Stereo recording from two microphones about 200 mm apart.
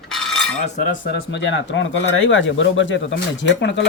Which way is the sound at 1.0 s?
60° left (ahead or behind).